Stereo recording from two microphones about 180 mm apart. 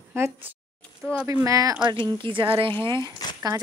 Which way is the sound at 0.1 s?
15° right (ahead or behind).